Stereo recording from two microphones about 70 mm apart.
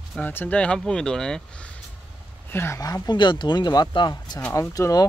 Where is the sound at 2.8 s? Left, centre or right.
Left.